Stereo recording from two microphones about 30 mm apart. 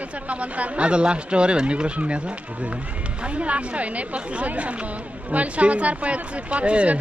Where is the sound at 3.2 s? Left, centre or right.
Right.